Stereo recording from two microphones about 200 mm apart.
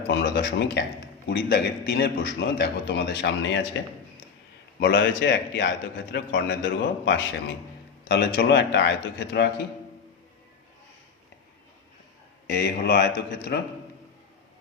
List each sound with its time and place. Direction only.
0.1 s a man's voice: 55° left (ahead or behind)
4.8 s a man's voice: 60° left (ahead or behind)
12.5 s a man's voice: 50° left (ahead or behind)